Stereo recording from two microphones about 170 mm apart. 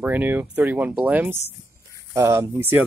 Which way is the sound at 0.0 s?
10° right (ahead or behind).